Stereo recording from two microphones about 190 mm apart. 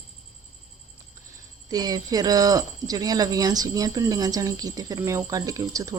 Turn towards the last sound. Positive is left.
turn(degrees=-15)  # may be behind; listen again after turning